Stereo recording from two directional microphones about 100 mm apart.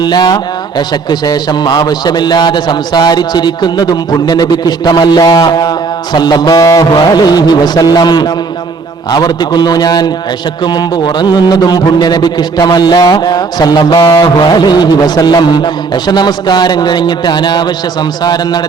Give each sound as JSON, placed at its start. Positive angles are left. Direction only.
{"t": 0.0, "sound": "a man's voice", "side_deg": 45}
{"t": 14.3, "sound": "a man's voice", "side_deg": 45}